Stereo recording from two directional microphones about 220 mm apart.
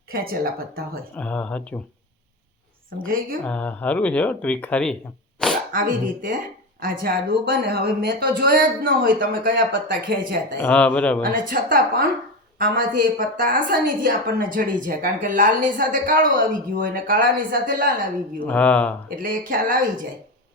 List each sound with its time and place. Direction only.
0.1 s speech: 40° right (ahead or behind)
1.1 s speech: 5° left (ahead or behind)
2.9 s speech: 45° right (ahead or behind)
3.4 s speech: 5° left (ahead or behind)
5.4 s a sound: 5° left (ahead or behind)
5.7 s a woman's voice: 40° right (ahead or behind)
10.6 s speech: 5° left (ahead or behind)
11.2 s a woman's voice: 40° right (ahead or behind)
18.3 s speech: 5° left (ahead or behind)
19.1 s a woman's voice: 40° right (ahead or behind)